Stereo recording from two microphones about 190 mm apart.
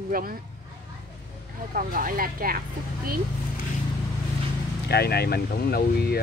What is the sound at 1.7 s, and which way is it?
Speech, 45° right (ahead or behind).